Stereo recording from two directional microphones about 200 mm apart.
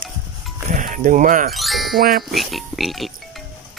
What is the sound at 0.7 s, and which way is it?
Speech, 40° right (ahead or behind).